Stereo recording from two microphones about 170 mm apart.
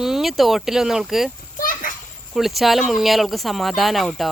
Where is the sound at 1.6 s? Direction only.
55° left (ahead or behind).